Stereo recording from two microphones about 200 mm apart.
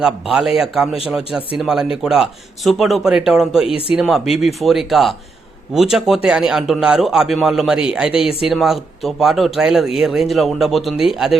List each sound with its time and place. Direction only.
0.0 s speech: 5° right (ahead or behind)
3.7 s speech: 30° left (ahead or behind)
3.9 s speech: centre (ahead or behind)